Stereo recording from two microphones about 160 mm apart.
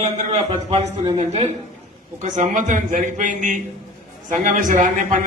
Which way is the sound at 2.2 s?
50° right (ahead or behind).